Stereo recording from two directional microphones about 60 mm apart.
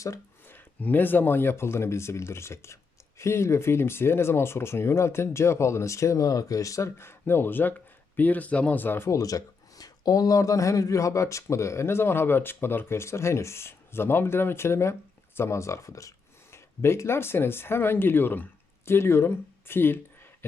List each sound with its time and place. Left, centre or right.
0.4 s speech: left
7.0 s speech: left
9.0 s speech: left
18.9 s speech: left